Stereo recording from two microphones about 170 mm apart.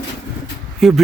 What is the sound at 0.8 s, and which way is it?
Speech, centre (ahead or behind).